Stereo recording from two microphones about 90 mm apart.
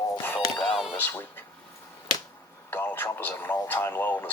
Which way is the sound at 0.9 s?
25° left (ahead or behind).